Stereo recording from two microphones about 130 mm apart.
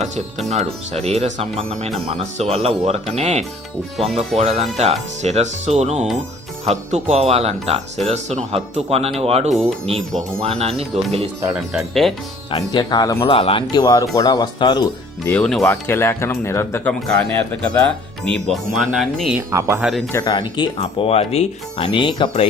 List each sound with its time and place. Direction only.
0.4 s speech: 60° right (ahead or behind)
9.5 s speech: centre (ahead or behind)
10.4 s speech: 50° right (ahead or behind)
11.5 s speech: 5° right (ahead or behind)
12.7 s speech: 30° left (ahead or behind)
13.2 s speech: 45° left (ahead or behind)
15.3 s speech: 5° left (ahead or behind)
15.7 s speech: 20° left (ahead or behind)
17.5 s speech: 10° left (ahead or behind)
19.4 s speech: 25° right (ahead or behind)
19.8 s speech: centre (ahead or behind)
20.1 s speech: 35° left (ahead or behind)
21.1 s speech: 50° left (ahead or behind)